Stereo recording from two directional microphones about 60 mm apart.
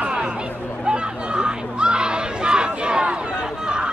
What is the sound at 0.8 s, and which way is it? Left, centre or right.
Battle cry, centre.